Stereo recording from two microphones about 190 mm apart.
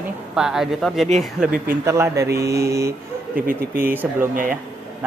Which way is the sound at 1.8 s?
15° right (ahead or behind).